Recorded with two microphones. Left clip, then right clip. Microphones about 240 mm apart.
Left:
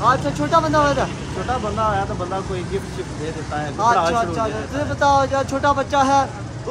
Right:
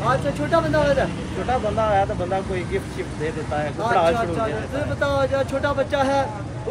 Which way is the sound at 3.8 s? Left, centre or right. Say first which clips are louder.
Left 3 dB; centre.